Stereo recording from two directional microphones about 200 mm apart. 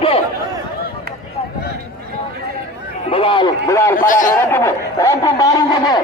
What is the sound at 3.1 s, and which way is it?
Speech, 25° left (ahead or behind).